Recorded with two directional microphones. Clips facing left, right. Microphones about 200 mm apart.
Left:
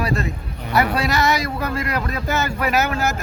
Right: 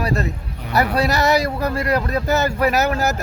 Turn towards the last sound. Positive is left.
turn(degrees=-40)  # may be behind; listen again after turning